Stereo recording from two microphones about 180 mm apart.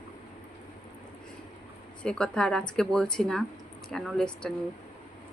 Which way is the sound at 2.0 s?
5° left (ahead or behind).